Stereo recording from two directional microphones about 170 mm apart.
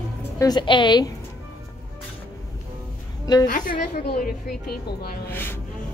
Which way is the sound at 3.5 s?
50° left (ahead or behind).